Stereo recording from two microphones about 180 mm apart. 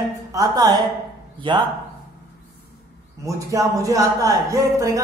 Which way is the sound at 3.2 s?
20° right (ahead or behind).